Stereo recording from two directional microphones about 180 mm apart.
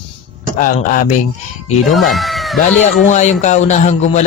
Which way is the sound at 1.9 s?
Centre (ahead or behind).